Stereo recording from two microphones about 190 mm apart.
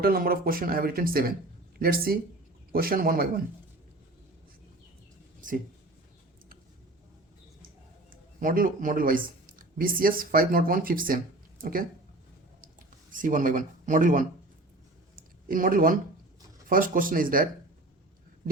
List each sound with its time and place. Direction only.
0.0 s speech: 50° right (ahead or behind)
5.4 s speech: 45° right (ahead or behind)
8.1 s speech: 45° right (ahead or behind)
12.6 s a sound: 45° right (ahead or behind)
16.6 s speech: 45° right (ahead or behind)